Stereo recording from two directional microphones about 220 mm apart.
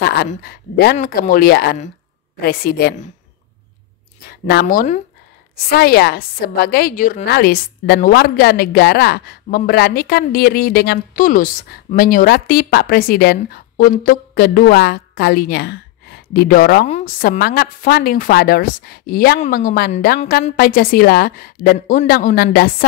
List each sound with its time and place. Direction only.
0.0 s a sound: 45° left (ahead or behind)
0.3 s a woman's voice: 45° left (ahead or behind)
4.3 s speech: 45° left (ahead or behind)
5.7 s a woman's voice: 45° left (ahead or behind)